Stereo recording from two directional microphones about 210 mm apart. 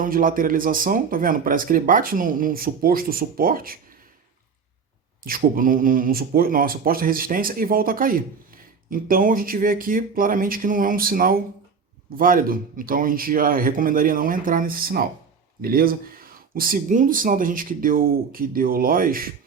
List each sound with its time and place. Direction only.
0.0 s speech: 40° right (ahead or behind)
5.2 s speech: 40° right (ahead or behind)